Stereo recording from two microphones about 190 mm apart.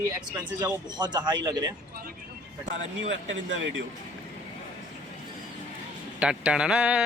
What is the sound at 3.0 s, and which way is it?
Speech, 75° right (ahead or behind).